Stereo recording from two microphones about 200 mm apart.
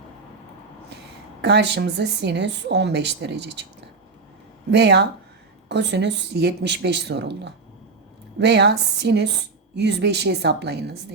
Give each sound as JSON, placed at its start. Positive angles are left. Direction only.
{"t": 1.4, "sound": "a woman's voice", "side_deg": -60}
{"t": 4.7, "sound": "a woman's voice", "side_deg": -60}